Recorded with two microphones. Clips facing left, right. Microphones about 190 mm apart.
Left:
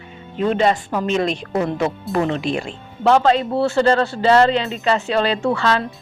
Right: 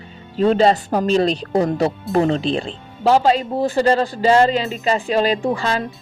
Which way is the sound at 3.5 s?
15° right (ahead or behind).